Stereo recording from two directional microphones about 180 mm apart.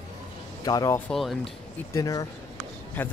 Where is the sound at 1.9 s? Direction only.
20° left (ahead or behind).